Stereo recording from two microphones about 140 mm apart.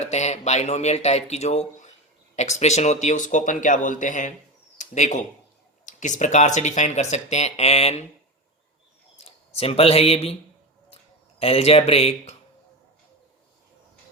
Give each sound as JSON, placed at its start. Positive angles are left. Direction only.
{"t": 0.0, "sound": "speech", "side_deg": 55}
{"t": 9.5, "sound": "speech", "side_deg": 45}
{"t": 10.8, "sound": "a sound", "side_deg": 45}